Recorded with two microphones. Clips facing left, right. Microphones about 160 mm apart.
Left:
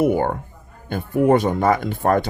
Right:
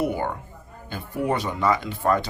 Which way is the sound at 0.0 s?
50° left (ahead or behind).